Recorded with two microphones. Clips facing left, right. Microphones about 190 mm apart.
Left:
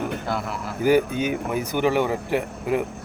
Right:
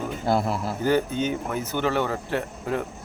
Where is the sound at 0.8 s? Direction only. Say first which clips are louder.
Left 5 dB; 10° left (ahead or behind).